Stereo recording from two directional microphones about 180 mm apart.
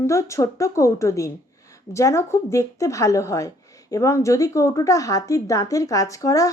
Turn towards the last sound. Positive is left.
turn(degrees=20)  # may be behind; listen again after turning